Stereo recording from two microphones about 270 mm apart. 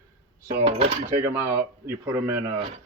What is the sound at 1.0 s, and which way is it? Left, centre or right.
Speech, right.